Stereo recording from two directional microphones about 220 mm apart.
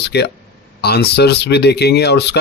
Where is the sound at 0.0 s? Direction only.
50° left (ahead or behind).